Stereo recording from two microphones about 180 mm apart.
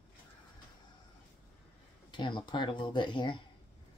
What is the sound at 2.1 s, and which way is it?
Speech, 25° left (ahead or behind).